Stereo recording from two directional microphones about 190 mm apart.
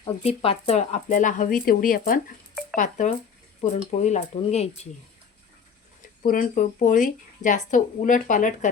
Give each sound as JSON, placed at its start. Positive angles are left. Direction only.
{"t": 0.2, "sound": "speech", "side_deg": 30}
{"t": 6.2, "sound": "speech", "side_deg": 45}